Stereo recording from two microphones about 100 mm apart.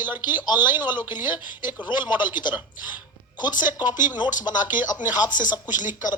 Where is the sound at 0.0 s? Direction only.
20° right (ahead or behind).